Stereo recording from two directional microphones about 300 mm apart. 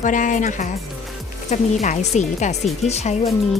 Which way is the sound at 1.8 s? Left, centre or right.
Left.